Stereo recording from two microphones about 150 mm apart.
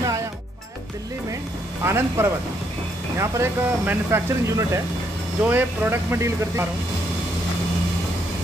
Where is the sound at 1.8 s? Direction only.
15° right (ahead or behind).